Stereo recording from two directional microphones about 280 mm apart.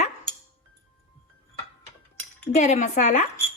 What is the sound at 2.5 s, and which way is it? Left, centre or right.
Speech, left.